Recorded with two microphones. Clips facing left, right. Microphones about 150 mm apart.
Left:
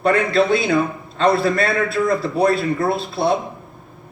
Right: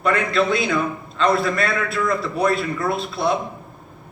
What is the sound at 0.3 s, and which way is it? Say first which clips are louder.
A man's voice: left 3 dB; 35° left (ahead or behind).